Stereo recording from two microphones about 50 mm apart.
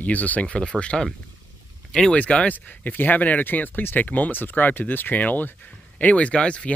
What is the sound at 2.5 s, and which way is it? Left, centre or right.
Speech, left.